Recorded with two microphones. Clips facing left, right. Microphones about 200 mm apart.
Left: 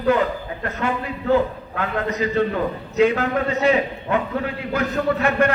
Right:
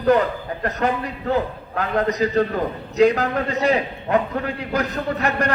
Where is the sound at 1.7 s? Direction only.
40° right (ahead or behind).